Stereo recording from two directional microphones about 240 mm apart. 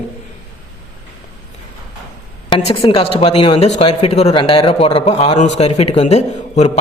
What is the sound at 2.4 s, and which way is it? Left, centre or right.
Speech, left.